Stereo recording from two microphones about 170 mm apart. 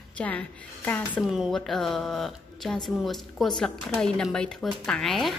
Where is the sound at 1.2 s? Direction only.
Centre (ahead or behind).